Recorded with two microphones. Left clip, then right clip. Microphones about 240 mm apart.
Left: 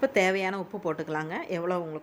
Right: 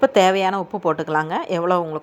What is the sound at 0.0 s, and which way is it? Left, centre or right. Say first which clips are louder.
A woman's voice: right 9 dB; centre.